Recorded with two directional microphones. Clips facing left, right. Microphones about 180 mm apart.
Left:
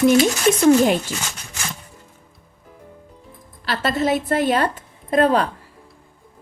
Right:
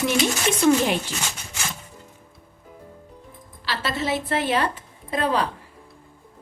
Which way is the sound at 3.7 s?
50° left (ahead or behind).